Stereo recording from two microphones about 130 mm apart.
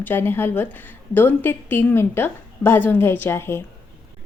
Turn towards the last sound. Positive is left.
turn(degrees=20)  # may be behind; listen again after turning